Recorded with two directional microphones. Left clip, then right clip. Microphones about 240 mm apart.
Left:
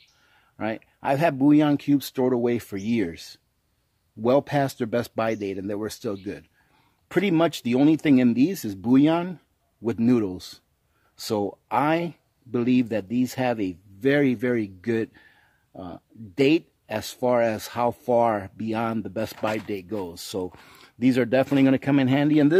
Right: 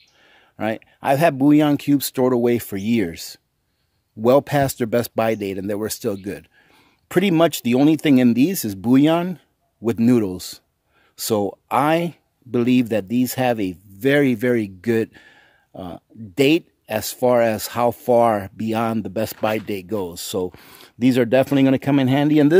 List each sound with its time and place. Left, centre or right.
0.2 s speech: right